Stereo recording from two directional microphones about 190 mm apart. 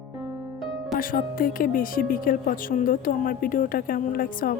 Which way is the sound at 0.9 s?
45° left (ahead or behind).